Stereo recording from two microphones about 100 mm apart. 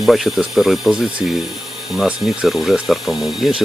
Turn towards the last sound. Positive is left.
turn(degrees=-5)  # may be behind; listen again after turning